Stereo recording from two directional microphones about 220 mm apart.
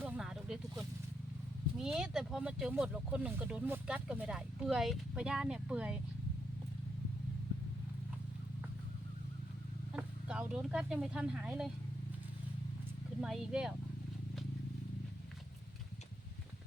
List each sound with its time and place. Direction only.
0.0 s a sound: 5° right (ahead or behind)
1.8 s speech: centre (ahead or behind)
9.9 s speech: 5° right (ahead or behind)
13.2 s speech: centre (ahead or behind)